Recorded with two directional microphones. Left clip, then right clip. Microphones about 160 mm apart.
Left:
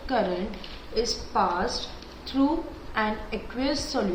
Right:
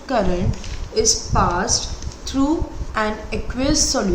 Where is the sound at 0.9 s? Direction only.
90° right.